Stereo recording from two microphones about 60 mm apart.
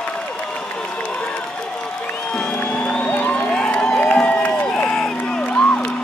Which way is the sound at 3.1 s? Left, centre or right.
Left.